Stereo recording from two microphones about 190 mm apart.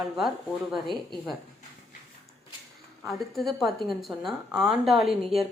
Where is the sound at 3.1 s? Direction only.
Centre (ahead or behind).